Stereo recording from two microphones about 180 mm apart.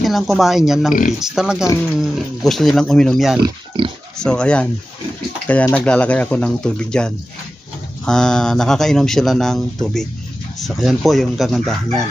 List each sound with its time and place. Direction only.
0.0 s speech: centre (ahead or behind)
3.4 s speech: 30° right (ahead or behind)
4.2 s speech: 5° left (ahead or behind)